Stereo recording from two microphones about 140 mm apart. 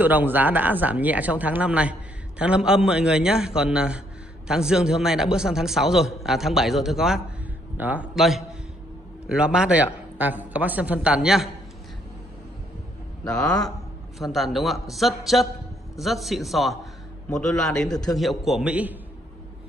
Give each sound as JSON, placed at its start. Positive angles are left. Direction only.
{"t": 0.0, "sound": "a man's voice", "side_deg": -15}
{"t": 8.2, "sound": "a man's voice", "side_deg": 0}
{"t": 13.4, "sound": "a man's voice", "side_deg": 25}
{"t": 13.7, "sound": "a man's voice", "side_deg": 0}